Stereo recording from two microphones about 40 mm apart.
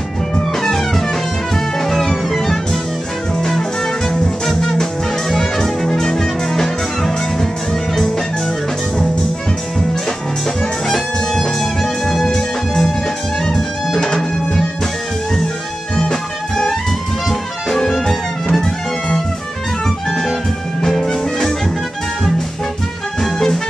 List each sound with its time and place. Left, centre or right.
0.6 s music: centre
10.9 s music: centre
12.4 s music: centre
13.9 s music: centre
16.0 s music: centre
23.2 s music: centre